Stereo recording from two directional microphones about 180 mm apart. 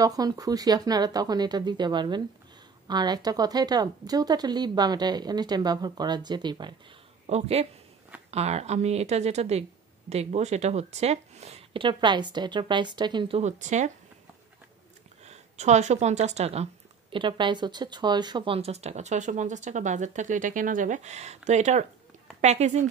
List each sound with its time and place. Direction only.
0.0 s a woman's voice: 20° right (ahead or behind)
7.2 s a woman's voice: 35° right (ahead or behind)
13.4 s a woman's voice: 40° right (ahead or behind)
15.2 s a woman's voice: 40° right (ahead or behind)